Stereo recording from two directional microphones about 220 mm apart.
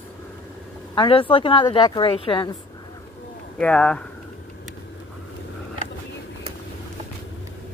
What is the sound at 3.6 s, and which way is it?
Speech, 5° left (ahead or behind).